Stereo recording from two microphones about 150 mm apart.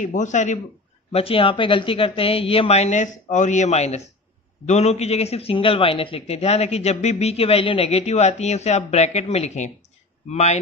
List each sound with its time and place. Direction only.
0.0 s a man's voice: 55° left (ahead or behind)
1.1 s a man's voice: 40° left (ahead or behind)